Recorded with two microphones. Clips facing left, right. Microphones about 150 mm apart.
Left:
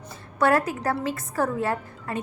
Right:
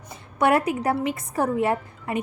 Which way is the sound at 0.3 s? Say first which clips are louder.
Right 1 dB; 20° right (ahead or behind).